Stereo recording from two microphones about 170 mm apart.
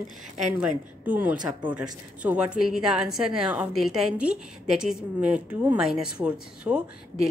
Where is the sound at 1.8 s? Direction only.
5° right (ahead or behind).